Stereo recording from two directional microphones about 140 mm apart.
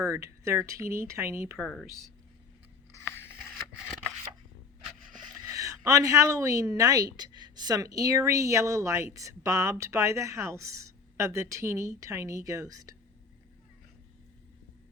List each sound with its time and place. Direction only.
0.0 s a woman's voice: 20° right (ahead or behind)
1.5 s speech: 5° left (ahead or behind)
2.9 s a sound: 15° left (ahead or behind)
3.4 s scissors: centre (ahead or behind)
5.1 s a woman's voice: 30° right (ahead or behind)